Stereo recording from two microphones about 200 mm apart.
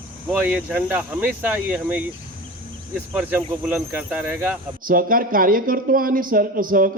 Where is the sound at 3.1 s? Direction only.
10° right (ahead or behind).